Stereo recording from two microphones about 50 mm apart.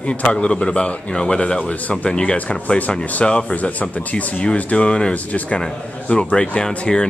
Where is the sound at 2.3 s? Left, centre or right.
Left.